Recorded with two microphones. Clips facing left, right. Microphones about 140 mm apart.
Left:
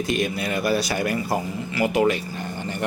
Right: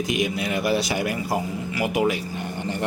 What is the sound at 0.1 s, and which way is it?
A man's voice, 15° right (ahead or behind).